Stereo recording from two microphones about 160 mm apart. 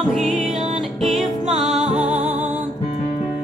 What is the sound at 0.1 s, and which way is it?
Music, centre (ahead or behind).